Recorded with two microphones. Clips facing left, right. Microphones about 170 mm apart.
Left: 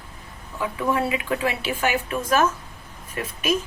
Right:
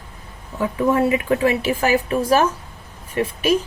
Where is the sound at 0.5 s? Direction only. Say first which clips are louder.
Right 6 dB; 45° right (ahead or behind).